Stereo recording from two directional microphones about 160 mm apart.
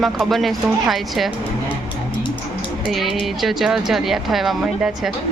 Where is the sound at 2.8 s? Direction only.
Centre (ahead or behind).